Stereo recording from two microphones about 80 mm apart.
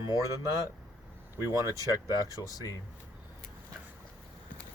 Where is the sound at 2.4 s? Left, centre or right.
Left.